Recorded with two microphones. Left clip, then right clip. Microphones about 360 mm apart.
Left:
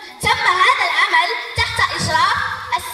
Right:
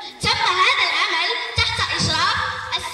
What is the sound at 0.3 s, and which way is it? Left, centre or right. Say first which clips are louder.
Music: left 3 dB; centre.